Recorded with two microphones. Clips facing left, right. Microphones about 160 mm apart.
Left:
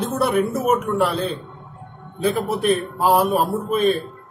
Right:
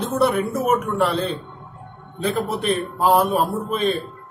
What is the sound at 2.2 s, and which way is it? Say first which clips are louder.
A man's voice: left 2 dB; centre (ahead or behind).